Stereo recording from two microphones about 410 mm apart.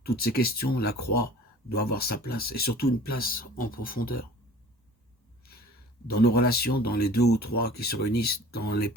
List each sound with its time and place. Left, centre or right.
0.0 s speech: left
6.1 s speech: left